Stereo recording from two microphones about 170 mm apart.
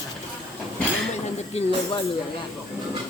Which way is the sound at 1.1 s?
40° left (ahead or behind).